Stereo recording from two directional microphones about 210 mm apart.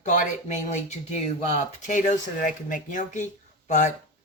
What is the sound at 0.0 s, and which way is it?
Speech, 35° left (ahead or behind).